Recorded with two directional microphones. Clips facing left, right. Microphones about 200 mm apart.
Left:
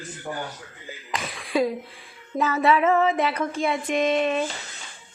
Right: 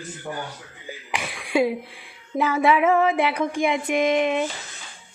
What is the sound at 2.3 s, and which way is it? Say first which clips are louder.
Female singing: right 1 dB; 10° right (ahead or behind).